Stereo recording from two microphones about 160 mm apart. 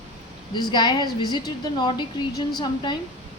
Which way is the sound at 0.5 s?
25° left (ahead or behind).